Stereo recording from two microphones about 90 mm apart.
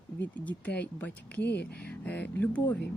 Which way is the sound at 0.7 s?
15° left (ahead or behind).